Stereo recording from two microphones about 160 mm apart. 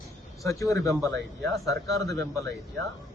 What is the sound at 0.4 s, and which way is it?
Speech, 20° left (ahead or behind).